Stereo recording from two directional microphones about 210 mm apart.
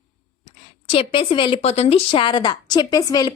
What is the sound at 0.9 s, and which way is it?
Speech, 25° left (ahead or behind).